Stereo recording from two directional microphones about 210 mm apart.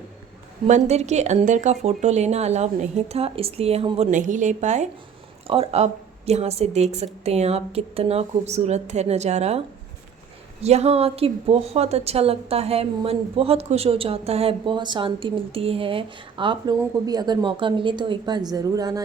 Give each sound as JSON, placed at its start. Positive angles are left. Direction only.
{"t": 0.7, "sound": "a woman's voice", "side_deg": -30}